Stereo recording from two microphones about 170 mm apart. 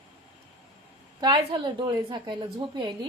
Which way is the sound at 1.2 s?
30° right (ahead or behind).